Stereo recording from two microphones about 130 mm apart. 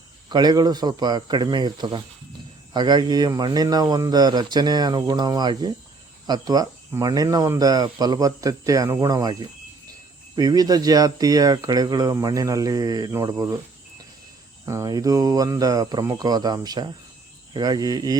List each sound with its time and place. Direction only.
0.3 s speech: 30° right (ahead or behind)
14.6 s speech: 20° right (ahead or behind)